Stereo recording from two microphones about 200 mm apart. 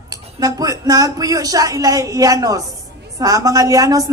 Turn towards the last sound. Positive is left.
turn(degrees=-15)  # may be behind; listen again after turning